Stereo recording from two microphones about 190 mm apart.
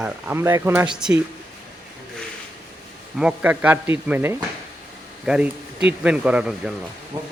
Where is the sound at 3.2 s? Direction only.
5° right (ahead or behind).